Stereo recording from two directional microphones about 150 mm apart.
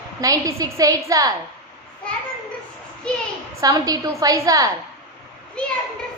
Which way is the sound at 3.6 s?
25° right (ahead or behind).